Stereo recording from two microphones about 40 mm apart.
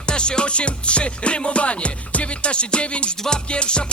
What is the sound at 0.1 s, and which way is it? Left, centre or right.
Music, left.